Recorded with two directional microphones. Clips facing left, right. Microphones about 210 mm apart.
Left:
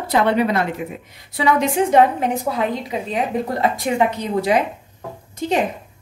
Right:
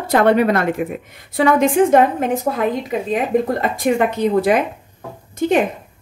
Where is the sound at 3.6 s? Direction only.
50° right (ahead or behind).